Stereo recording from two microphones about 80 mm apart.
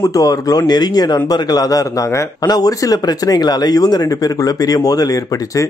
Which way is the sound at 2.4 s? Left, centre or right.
Left.